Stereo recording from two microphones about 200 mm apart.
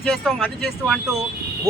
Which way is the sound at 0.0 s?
Centre (ahead or behind).